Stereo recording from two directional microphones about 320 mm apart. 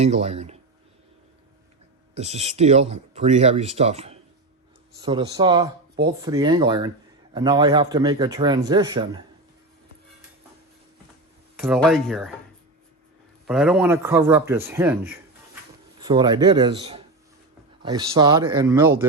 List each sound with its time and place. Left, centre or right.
0.0 s speech: centre
2.1 s speech: centre
11.6 s speech: centre
13.5 s speech: centre